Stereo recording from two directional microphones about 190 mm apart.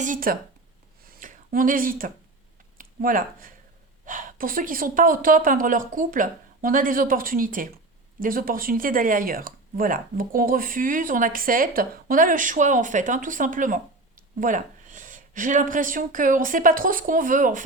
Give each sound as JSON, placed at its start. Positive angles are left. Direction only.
{"t": 0.0, "sound": "speech", "side_deg": -45}
{"t": 1.0, "sound": "a sound", "side_deg": -45}
{"t": 2.7, "sound": "speech", "side_deg": -45}